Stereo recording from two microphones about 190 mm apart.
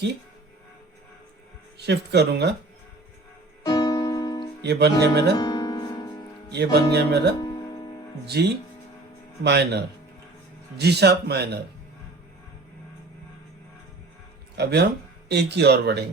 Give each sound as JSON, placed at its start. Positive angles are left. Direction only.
{"t": 1.8, "sound": "speech", "side_deg": -60}
{"t": 3.6, "sound": "music", "side_deg": 20}
{"t": 4.6, "sound": "speech", "side_deg": -60}
{"t": 5.4, "sound": "music", "side_deg": 20}
{"t": 6.5, "sound": "speech", "side_deg": -60}
{"t": 7.3, "sound": "music", "side_deg": 20}
{"t": 8.4, "sound": "speech", "side_deg": -60}
{"t": 14.5, "sound": "speech", "side_deg": -60}